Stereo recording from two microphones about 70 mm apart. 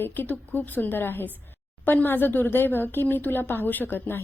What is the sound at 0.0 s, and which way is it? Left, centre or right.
Speech, left.